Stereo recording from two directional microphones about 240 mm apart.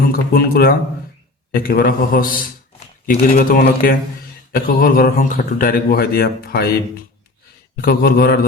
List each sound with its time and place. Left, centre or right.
0.1 s a man's voice: left